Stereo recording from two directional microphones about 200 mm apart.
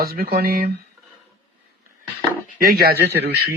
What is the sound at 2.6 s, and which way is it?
Speech, 50° right (ahead or behind).